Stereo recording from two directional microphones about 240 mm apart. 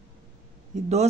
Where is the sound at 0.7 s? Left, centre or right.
Right.